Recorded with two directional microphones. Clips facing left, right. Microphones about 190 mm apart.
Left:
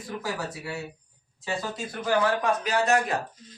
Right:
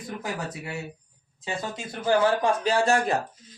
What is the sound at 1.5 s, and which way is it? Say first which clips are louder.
Speech: left 1 dB; 25° right (ahead or behind).